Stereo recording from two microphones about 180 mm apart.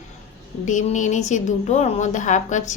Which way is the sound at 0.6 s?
45° left (ahead or behind).